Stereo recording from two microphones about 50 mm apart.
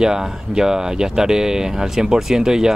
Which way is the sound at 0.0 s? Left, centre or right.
Centre.